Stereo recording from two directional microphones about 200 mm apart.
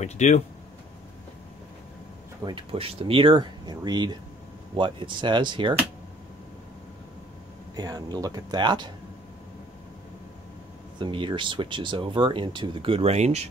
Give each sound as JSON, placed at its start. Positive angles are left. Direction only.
{"t": 0.0, "sound": "speech", "side_deg": 35}
{"t": 2.4, "sound": "speech", "side_deg": -25}
{"t": 7.7, "sound": "speech", "side_deg": -20}
{"t": 11.0, "sound": "speech", "side_deg": -25}